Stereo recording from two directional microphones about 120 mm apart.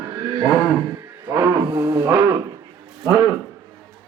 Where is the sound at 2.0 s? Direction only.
25° right (ahead or behind).